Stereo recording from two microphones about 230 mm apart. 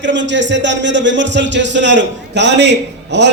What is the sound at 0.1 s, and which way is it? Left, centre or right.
A man's voice, right.